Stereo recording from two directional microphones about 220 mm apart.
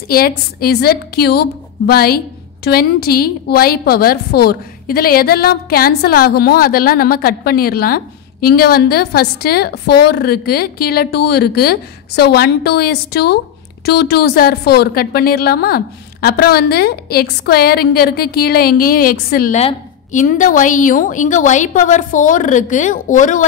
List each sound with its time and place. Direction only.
0.1 s a woman's voice: 45° left (ahead or behind)